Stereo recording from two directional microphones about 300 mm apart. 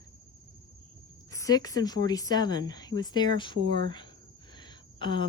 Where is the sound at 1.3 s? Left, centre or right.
Centre.